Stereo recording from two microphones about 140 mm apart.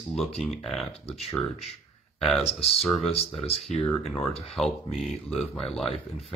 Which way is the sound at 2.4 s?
45° left (ahead or behind).